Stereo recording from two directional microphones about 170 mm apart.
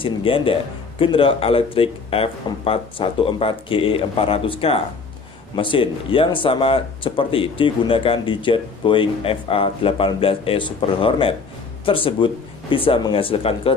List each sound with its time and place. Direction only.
0.0 s speech: 30° left (ahead or behind)